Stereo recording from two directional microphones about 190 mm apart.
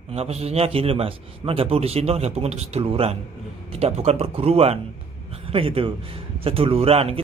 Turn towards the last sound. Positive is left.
turn(degrees=-30)  # may be behind; listen again after turning